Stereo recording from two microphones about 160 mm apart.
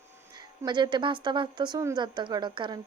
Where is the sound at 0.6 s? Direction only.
30° right (ahead or behind).